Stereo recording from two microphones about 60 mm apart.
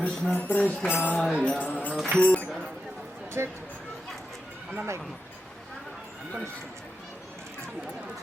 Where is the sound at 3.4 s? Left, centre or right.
Right.